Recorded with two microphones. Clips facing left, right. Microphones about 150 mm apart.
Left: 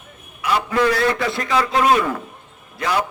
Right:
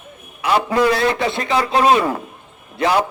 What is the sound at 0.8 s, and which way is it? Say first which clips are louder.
A man's voice: even; 20° right (ahead or behind).